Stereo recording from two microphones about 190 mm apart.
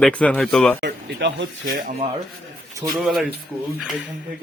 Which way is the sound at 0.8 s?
65° right (ahead or behind).